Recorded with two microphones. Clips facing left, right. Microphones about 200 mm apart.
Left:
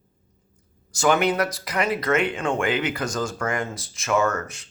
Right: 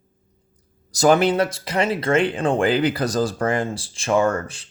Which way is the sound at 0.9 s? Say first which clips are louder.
Right 4 dB; 35° right (ahead or behind).